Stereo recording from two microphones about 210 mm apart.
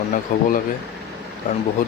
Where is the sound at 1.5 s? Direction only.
35° left (ahead or behind).